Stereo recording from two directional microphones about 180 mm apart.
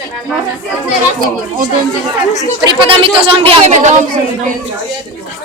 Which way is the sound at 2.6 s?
30° right (ahead or behind).